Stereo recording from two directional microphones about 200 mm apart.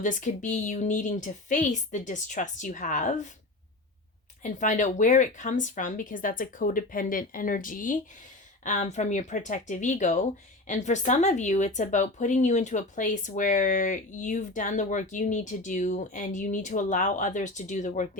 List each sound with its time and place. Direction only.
0.0 s speech: 40° left (ahead or behind)
4.4 s speech: 40° left (ahead or behind)